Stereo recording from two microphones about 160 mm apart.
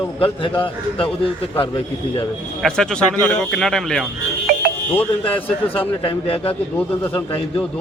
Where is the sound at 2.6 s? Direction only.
5° left (ahead or behind).